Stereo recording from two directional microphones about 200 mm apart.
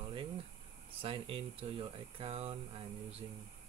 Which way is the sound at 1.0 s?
25° right (ahead or behind).